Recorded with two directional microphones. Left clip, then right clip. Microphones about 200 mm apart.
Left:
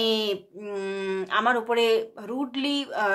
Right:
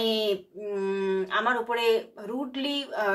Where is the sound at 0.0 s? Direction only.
40° left (ahead or behind).